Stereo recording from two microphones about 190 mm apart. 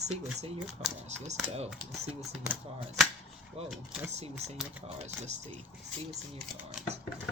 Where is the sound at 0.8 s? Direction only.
35° right (ahead or behind).